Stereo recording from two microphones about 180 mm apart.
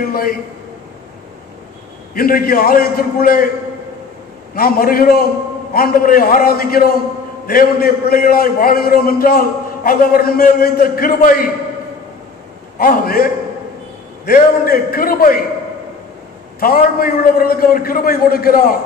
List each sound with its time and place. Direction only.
0.1 s a man's voice: 55° left (ahead or behind)
2.1 s a man's voice: 55° left (ahead or behind)
4.6 s a man's voice: 55° left (ahead or behind)
12.7 s a man's voice: 55° left (ahead or behind)
16.5 s a man's voice: 55° left (ahead or behind)